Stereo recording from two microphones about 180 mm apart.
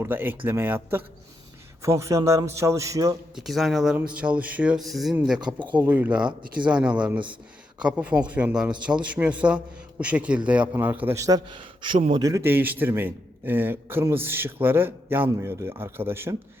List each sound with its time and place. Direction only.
0.0 s a man's voice: 10° right (ahead or behind)
3.3 s a man's voice: centre (ahead or behind)
5.4 s speech: 25° right (ahead or behind)
5.9 s a man's voice: 10° right (ahead or behind)